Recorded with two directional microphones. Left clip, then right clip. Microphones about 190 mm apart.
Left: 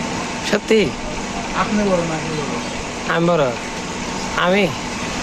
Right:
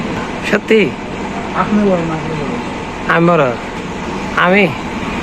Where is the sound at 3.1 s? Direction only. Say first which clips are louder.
Right 6 dB; 10° left (ahead or behind).